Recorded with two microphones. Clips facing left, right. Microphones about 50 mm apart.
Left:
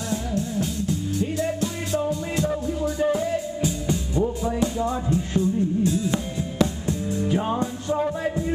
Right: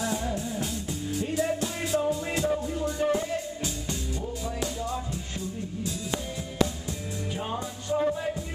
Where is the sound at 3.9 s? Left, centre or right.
Left.